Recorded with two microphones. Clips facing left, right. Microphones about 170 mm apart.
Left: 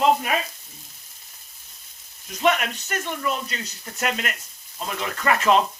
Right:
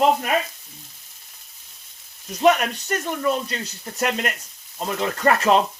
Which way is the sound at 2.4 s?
40° right (ahead or behind).